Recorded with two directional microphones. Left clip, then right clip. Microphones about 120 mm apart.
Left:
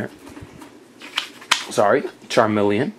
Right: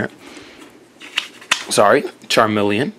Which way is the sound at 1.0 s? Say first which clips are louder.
Right 3 dB; 5° left (ahead or behind).